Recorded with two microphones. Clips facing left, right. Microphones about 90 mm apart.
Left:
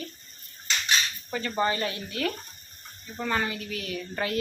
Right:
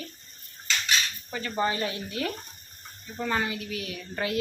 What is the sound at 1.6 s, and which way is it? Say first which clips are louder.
Speech: even; 15° right (ahead or behind).